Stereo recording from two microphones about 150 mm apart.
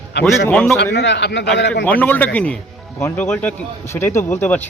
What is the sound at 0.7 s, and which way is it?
Speech, 90° left.